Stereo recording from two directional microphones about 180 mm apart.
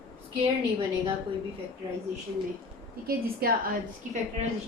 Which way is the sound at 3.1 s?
55° right (ahead or behind).